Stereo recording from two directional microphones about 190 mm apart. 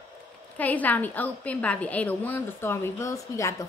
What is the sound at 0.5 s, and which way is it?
A woman's voice, 10° left (ahead or behind).